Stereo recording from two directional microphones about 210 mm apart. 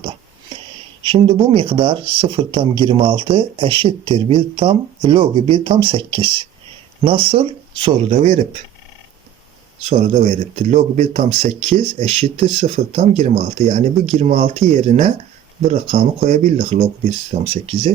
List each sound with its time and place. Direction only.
1.0 s speech: 25° right (ahead or behind)
9.8 s speech: 30° right (ahead or behind)